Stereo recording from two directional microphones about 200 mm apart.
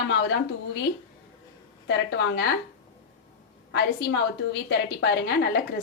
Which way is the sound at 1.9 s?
55° left (ahead or behind).